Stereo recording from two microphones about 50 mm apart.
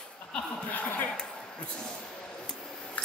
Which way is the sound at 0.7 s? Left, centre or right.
Left.